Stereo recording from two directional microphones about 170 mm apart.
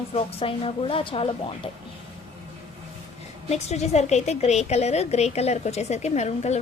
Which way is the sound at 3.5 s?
40° left (ahead or behind).